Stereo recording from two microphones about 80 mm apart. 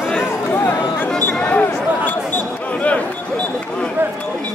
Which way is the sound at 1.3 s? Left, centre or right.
Centre.